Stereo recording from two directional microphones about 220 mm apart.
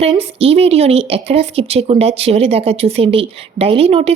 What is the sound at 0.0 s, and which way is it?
A woman's voice, 25° right (ahead or behind).